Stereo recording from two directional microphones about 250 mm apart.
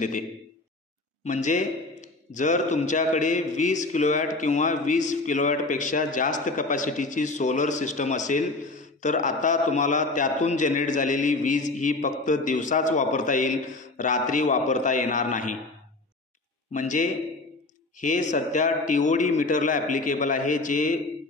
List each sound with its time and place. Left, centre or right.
1.2 s a man's voice: left
16.7 s a man's voice: left